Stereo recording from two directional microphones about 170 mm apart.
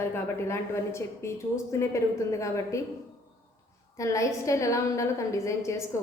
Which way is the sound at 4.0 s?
20° left (ahead or behind).